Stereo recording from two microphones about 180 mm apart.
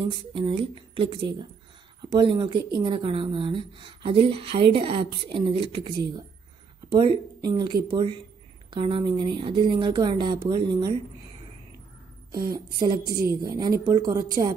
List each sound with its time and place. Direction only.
0.0 s speech: 30° right (ahead or behind)
12.5 s speech: 20° right (ahead or behind)